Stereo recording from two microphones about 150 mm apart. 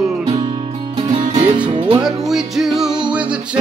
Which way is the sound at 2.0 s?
5° right (ahead or behind).